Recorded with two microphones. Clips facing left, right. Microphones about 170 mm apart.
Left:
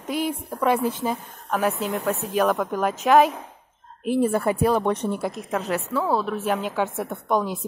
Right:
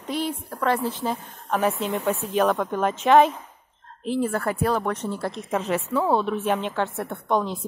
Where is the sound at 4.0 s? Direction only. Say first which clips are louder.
Left 3 dB; 15° left (ahead or behind).